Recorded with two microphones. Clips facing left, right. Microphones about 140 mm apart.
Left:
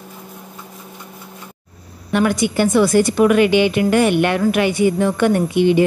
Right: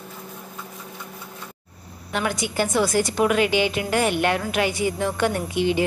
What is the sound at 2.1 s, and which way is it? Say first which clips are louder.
Speech: left 8 dB; 60° left (ahead or behind).